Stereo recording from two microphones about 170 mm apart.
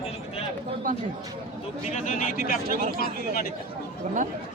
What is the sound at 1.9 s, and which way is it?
Speech, 50° left (ahead or behind).